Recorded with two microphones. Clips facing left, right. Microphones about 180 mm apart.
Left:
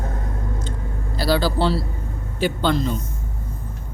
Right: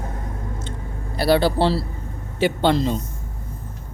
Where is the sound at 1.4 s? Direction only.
25° right (ahead or behind).